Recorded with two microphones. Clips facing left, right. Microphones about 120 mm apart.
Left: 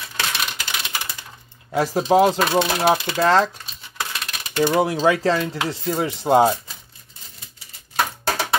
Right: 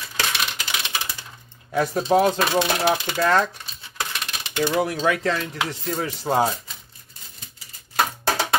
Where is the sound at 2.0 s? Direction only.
20° left (ahead or behind).